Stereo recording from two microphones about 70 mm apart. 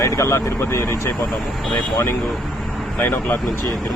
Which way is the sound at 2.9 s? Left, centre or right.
Left.